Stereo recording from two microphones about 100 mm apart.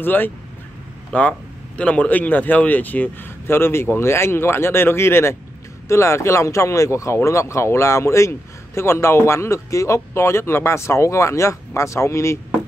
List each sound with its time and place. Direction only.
0.0 s speech: 20° left (ahead or behind)